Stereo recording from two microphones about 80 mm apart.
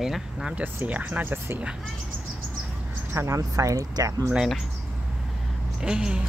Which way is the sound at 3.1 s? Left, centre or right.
Right.